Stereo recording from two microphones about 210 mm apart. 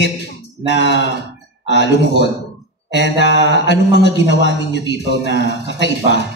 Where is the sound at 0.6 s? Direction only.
55° left (ahead or behind).